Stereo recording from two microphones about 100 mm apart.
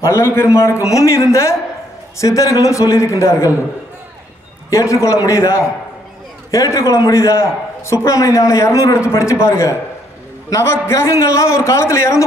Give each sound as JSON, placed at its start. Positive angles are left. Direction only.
{"t": 0.0, "sound": "a man's voice", "side_deg": 30}
{"t": 4.6, "sound": "a man's voice", "side_deg": 30}